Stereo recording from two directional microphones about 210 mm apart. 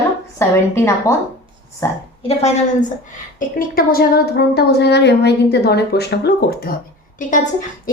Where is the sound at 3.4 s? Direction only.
45° left (ahead or behind).